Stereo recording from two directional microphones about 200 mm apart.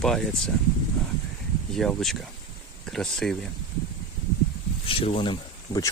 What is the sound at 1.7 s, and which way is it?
Speech, centre (ahead or behind).